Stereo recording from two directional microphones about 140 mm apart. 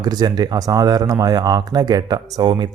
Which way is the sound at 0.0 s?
30° right (ahead or behind).